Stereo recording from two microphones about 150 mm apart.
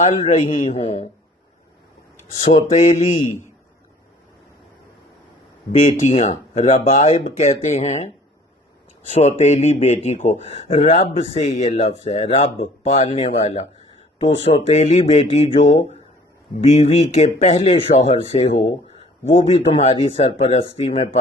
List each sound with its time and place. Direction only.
0.0 s speech: 50° left (ahead or behind)
2.4 s speech: 45° left (ahead or behind)
5.7 s speech: 45° left (ahead or behind)
9.1 s speech: 50° left (ahead or behind)